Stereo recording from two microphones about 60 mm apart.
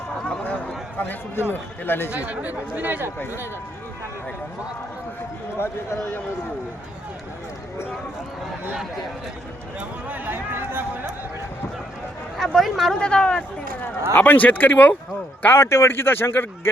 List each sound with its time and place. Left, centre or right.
0.4 s a sound: left
0.9 s a man's voice: left
2.1 s speech: right
5.5 s a man's voice: left
10.1 s speech: right
12.4 s speech: centre
13.0 s speech: centre; by 14.9 s left
15.5 s speech: left